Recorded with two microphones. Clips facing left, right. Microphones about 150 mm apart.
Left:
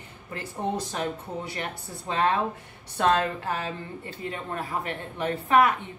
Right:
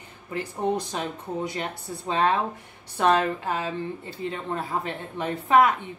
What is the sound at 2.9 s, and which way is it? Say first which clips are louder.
A woman's voice: right 2 dB; 20° right (ahead or behind).